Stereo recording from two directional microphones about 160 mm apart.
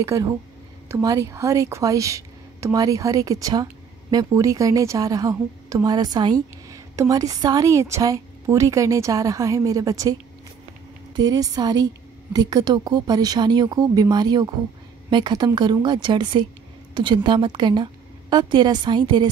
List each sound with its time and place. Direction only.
0.0 s a woman's voice: 20° right (ahead or behind)
11.1 s a woman's voice: 25° right (ahead or behind)